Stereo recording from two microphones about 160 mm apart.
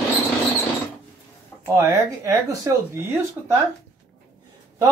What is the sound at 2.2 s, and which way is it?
Speech, 20° right (ahead or behind).